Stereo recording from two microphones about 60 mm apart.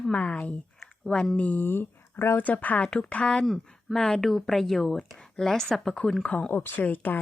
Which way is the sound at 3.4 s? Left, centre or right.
Centre.